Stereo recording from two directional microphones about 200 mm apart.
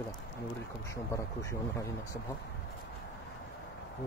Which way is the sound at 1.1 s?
15° left (ahead or behind).